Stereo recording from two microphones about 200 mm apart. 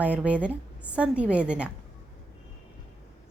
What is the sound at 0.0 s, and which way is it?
A woman's voice, 5° right (ahead or behind).